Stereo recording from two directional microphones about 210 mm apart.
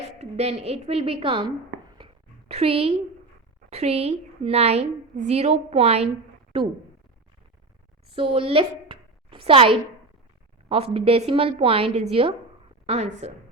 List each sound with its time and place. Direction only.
0.2 s a woman's voice: 30° right (ahead or behind)
2.0 s a sound: 25° right (ahead or behind)
3.7 s a woman's voice: 30° right (ahead or behind)
8.1 s a woman's voice: 25° right (ahead or behind)